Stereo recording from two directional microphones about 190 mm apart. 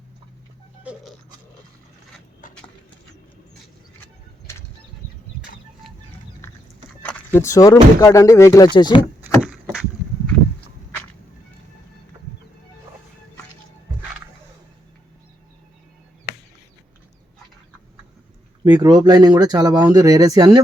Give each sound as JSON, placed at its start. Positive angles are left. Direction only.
{"t": 2.4, "sound": "clip-clop", "side_deg": 45}
{"t": 7.3, "sound": "speech", "side_deg": 15}
{"t": 9.4, "sound": "rowboat", "side_deg": -5}
{"t": 18.6, "sound": "speech", "side_deg": -20}